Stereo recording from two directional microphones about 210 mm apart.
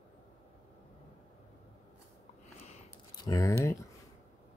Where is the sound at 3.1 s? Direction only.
15° left (ahead or behind).